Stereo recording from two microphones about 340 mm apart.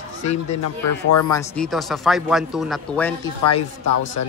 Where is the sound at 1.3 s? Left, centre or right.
Centre.